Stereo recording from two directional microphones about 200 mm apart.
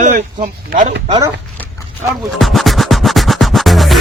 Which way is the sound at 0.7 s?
40° right (ahead or behind).